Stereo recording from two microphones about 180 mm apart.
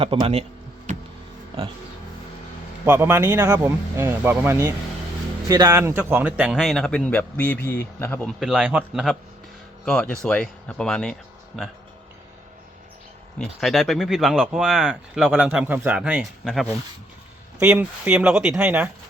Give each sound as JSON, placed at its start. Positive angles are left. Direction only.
{"t": 0.0, "sound": "speech", "side_deg": -30}
{"t": 2.8, "sound": "a man's voice", "side_deg": -15}
{"t": 13.4, "sound": "a man's voice", "side_deg": 0}